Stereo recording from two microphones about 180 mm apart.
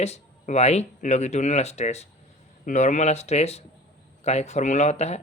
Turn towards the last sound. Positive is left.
turn(degrees=35)  # may be behind; listen again after turning